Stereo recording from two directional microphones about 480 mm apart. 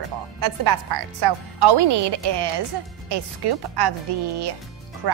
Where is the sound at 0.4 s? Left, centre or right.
Right.